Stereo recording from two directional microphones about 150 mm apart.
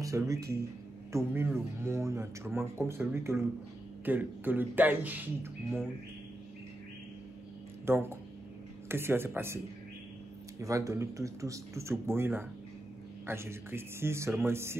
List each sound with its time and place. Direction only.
0.0 s speech: 20° right (ahead or behind)
7.8 s speech: 15° right (ahead or behind)
10.6 s speech: 20° right (ahead or behind)